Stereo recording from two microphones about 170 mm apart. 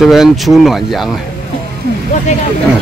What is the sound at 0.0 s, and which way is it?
Speech, centre (ahead or behind).